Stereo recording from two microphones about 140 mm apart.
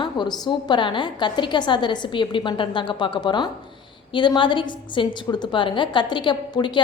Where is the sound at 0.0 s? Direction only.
30° left (ahead or behind).